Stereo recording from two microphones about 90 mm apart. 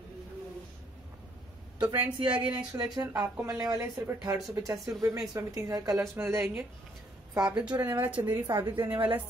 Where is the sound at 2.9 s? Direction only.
45° right (ahead or behind).